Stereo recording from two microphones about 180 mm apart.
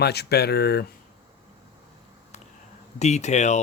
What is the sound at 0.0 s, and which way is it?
Speech, 65° left (ahead or behind).